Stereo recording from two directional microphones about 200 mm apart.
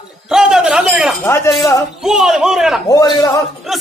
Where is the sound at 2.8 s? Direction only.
15° left (ahead or behind).